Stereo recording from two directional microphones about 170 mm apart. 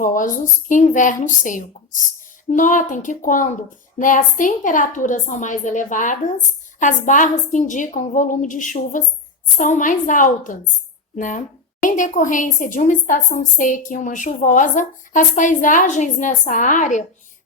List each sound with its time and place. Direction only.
0.0 s a woman's voice: 50° left (ahead or behind)